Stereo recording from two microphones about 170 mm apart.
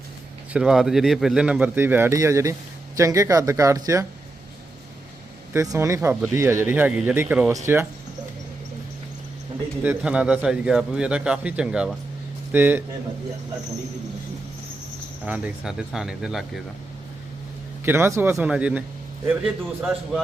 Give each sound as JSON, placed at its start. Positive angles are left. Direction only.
{"t": 0.5, "sound": "speech", "side_deg": -5}
{"t": 5.5, "sound": "speech", "side_deg": -15}
{"t": 9.8, "sound": "speech", "side_deg": -10}
{"t": 15.3, "sound": "speech", "side_deg": -5}
{"t": 17.8, "sound": "speech", "side_deg": -15}